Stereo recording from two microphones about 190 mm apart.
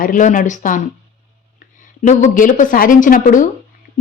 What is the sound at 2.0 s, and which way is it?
Speech, 40° left (ahead or behind).